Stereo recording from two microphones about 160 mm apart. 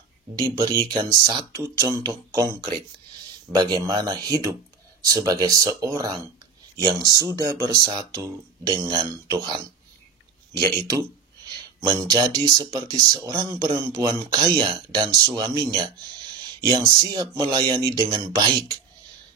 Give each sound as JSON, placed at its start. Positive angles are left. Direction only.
{"t": 0.4, "sound": "speech", "side_deg": -20}
{"t": 3.5, "sound": "speech", "side_deg": -25}
{"t": 10.9, "sound": "speech", "side_deg": -25}